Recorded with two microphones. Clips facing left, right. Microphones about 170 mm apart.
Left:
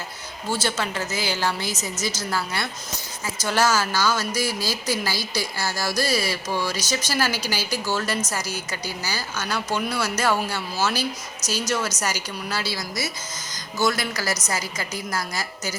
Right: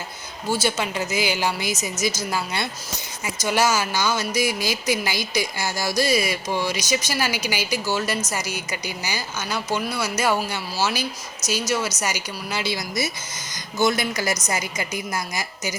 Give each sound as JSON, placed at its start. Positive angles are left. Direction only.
{"t": 0.5, "sound": "speech", "side_deg": -15}